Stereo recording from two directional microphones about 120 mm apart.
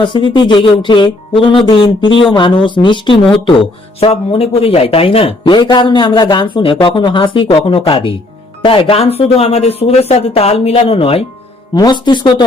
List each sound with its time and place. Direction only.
0.0 s speech: 40° left (ahead or behind)
11.7 s speech: 35° left (ahead or behind)